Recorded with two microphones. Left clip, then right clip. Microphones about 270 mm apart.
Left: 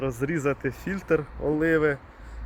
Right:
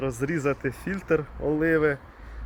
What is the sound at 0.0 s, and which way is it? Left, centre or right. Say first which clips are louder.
Speech: even; centre.